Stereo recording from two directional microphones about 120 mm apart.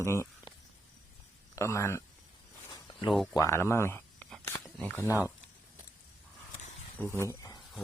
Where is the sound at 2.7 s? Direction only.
40° left (ahead or behind).